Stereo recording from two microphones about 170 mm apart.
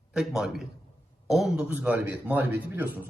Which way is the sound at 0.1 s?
5° right (ahead or behind).